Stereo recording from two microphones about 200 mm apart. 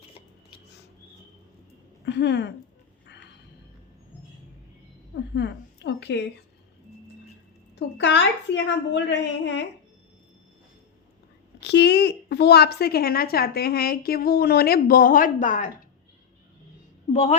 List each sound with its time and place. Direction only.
2.0 s a woman's voice: 60° left (ahead or behind)
5.3 s a sound: 60° left (ahead or behind)
7.8 s a woman's voice: 60° left (ahead or behind)
11.6 s a woman's voice: 55° left (ahead or behind); by 15.7 s 40° left (ahead or behind)
17.1 s a woman's voice: 30° left (ahead or behind)